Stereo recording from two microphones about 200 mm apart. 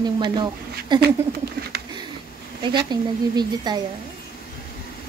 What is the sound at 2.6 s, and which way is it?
A woman's voice, 20° right (ahead or behind).